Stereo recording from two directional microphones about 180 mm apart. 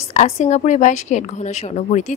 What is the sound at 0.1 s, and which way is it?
Speech, 40° left (ahead or behind).